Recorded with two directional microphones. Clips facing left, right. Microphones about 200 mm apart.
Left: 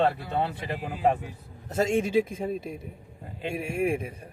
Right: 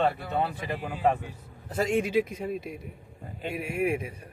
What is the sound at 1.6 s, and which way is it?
A man's voice, 25° left (ahead or behind).